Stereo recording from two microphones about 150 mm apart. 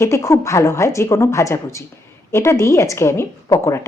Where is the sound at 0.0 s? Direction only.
20° left (ahead or behind).